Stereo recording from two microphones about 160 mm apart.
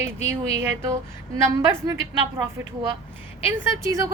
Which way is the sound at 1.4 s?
20° right (ahead or behind).